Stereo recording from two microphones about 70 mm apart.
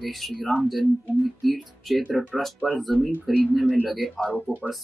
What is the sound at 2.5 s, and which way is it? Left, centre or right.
Speech, centre.